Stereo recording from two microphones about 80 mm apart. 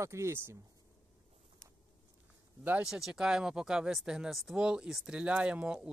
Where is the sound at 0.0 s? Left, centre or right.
Right.